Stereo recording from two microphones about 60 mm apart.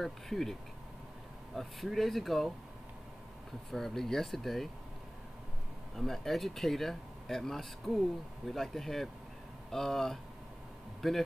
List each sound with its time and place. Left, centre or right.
0.0 s speech: centre
3.7 s speech: centre
5.9 s speech: centre